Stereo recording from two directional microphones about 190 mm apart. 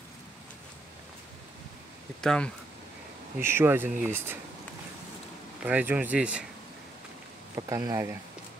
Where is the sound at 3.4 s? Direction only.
10° right (ahead or behind).